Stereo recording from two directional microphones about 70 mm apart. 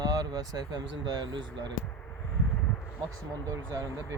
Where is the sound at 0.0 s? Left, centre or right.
Right.